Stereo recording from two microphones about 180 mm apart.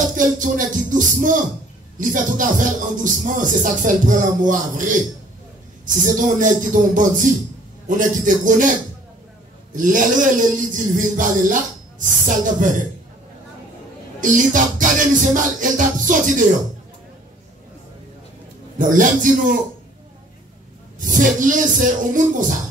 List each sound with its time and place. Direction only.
0.0 s music: 45° right (ahead or behind)
2.0 s speech: 45° right (ahead or behind)
9.8 s speech: 45° right (ahead or behind)
14.2 s speech: 45° right (ahead or behind)
18.8 s speech: 45° right (ahead or behind)
21.0 s speech: 45° right (ahead or behind)